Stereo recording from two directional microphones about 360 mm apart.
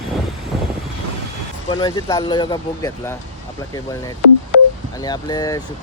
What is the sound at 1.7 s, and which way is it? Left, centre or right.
Speech, centre.